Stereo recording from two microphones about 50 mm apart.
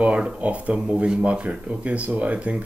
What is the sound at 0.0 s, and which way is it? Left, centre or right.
Speech, right.